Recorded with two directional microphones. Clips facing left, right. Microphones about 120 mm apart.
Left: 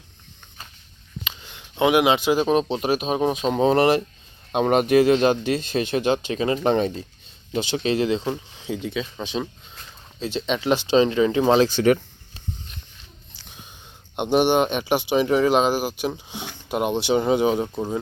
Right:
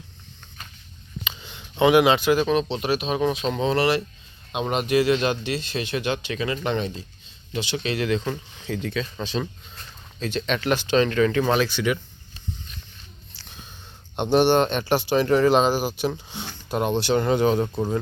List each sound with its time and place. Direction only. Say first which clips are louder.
1.5 s speech: right 1 dB; 10° left (ahead or behind); by 8.2 s 30° left (ahead or behind)
8.2 s speech: left 2 dB; 15° left (ahead or behind)
10.2 s speech: left 1 dB; 25° left (ahead or behind)
11.7 s speech: left 6 dB; 40° left (ahead or behind)
13.4 s a sound: even; 15° left (ahead or behind)
14.2 s speech: even; 10° left (ahead or behind)
17.7 s speech: right 1 dB; 5° left (ahead or behind)